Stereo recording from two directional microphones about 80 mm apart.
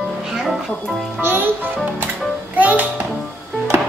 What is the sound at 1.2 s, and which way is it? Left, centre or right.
Music, right.